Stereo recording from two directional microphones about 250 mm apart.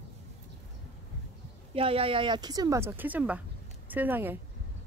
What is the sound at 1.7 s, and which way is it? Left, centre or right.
Speech, right.